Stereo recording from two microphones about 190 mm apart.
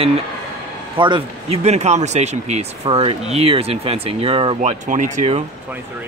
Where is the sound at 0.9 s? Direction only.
25° right (ahead or behind).